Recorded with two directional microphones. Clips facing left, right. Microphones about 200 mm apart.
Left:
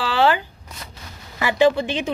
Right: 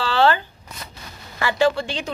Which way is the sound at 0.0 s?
15° left (ahead or behind).